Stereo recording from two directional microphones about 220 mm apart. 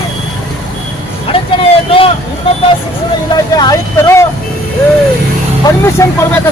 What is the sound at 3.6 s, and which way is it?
Vehicle, 15° left (ahead or behind).